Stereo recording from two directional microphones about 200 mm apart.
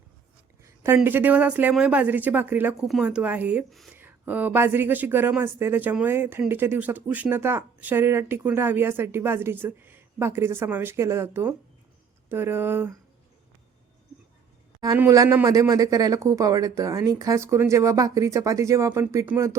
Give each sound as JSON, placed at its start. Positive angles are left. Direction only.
{"t": 0.6, "sound": "speech", "side_deg": -10}
{"t": 14.8, "sound": "speech", "side_deg": -15}